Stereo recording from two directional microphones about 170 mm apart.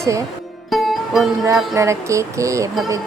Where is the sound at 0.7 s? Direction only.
Centre (ahead or behind).